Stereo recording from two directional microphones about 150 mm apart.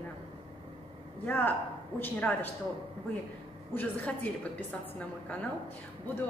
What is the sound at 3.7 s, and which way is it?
Speech, 10° left (ahead or behind).